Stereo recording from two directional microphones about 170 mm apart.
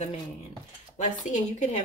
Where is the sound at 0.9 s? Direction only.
45° left (ahead or behind).